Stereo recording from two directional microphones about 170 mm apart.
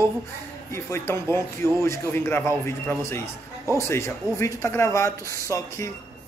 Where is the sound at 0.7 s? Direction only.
15° left (ahead or behind).